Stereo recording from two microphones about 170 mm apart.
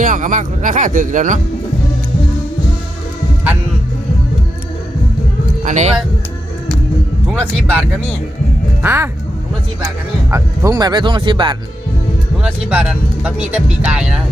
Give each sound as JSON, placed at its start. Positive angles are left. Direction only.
{"t": 0.0, "sound": "speech", "side_deg": -50}
{"t": 5.6, "sound": "speech", "side_deg": -45}
{"t": 7.3, "sound": "speech", "side_deg": 5}
{"t": 8.8, "sound": "speech", "side_deg": -15}
{"t": 10.3, "sound": "speech", "side_deg": -20}
{"t": 12.4, "sound": "speech", "side_deg": -5}